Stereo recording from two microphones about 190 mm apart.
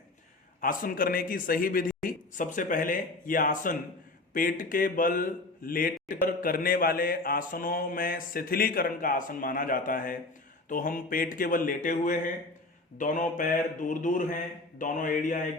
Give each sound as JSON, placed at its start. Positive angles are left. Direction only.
{"t": 0.6, "sound": "a man's voice", "side_deg": 45}